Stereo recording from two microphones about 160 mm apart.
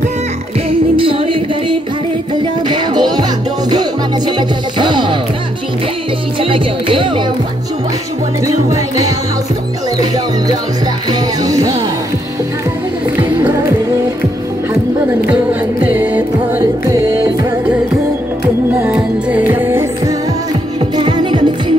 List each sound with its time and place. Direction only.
0.7 s music: 35° right (ahead or behind)
4.4 s music: 30° right (ahead or behind)
6.4 s music: 35° right (ahead or behind)
8.6 s music: 20° right (ahead or behind)
11.1 s music: 20° right (ahead or behind)
13.2 s music: 15° right (ahead or behind)
15.9 s music: 10° right (ahead or behind)
18.7 s music: 10° right (ahead or behind)
20.9 s music: 30° right (ahead or behind)